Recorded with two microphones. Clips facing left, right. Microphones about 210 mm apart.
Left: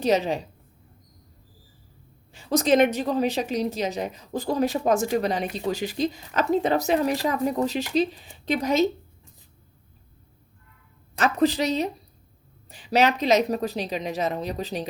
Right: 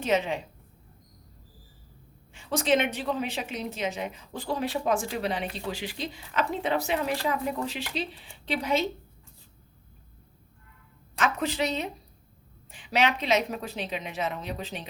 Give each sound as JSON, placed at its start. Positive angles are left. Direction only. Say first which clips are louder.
{"t": 0.0, "sound": "a woman's voice", "louder": "left 4 dB", "side_deg": 35}
{"t": 2.3, "sound": "a woman's voice", "louder": "left 5 dB", "side_deg": 40}
{"t": 11.2, "sound": "a woman's voice", "louder": "left 6 dB", "side_deg": 35}